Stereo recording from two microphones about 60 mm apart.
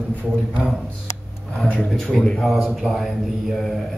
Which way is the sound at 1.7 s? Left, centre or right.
Centre.